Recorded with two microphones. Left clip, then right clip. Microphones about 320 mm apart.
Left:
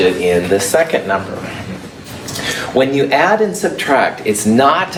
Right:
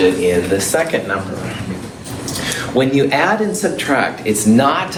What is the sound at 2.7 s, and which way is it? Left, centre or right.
Speech, left.